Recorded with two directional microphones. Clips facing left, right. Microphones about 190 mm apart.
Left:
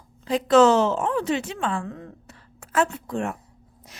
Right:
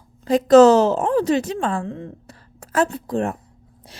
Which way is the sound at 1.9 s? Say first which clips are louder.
Right 5 dB; 25° right (ahead or behind).